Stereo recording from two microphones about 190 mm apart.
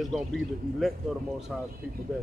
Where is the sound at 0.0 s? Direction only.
Centre (ahead or behind).